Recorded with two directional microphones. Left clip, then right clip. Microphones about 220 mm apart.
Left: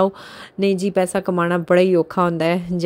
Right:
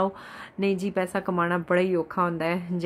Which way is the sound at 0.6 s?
30° left (ahead or behind).